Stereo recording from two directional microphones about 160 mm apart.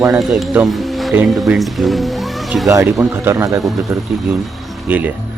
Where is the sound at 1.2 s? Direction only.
Centre (ahead or behind).